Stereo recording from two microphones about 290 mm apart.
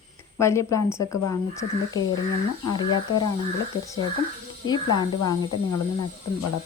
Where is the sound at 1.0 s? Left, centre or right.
Left.